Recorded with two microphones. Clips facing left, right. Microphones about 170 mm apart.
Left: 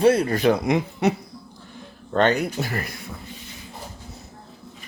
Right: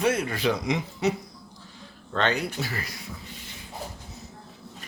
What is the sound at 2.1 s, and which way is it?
Speech, 50° left (ahead or behind).